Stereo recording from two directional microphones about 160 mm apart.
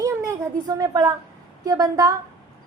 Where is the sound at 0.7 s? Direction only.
25° right (ahead or behind).